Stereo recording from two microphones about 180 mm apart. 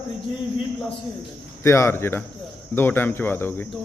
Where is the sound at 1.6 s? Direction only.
15° left (ahead or behind).